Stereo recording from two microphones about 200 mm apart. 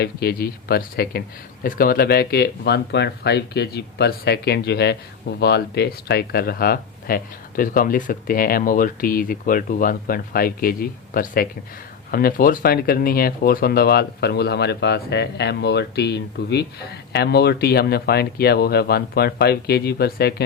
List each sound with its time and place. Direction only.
0.0 s speech: 50° left (ahead or behind)